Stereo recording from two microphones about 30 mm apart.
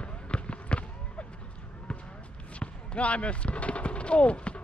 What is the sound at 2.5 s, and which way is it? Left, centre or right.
Speech, left.